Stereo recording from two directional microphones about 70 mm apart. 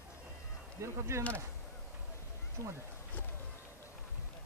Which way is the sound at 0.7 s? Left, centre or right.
Right.